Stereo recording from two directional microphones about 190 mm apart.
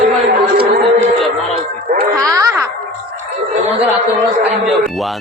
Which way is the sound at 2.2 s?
15° right (ahead or behind).